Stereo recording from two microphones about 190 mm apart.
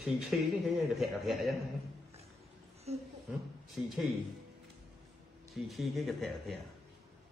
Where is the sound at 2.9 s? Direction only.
35° right (ahead or behind).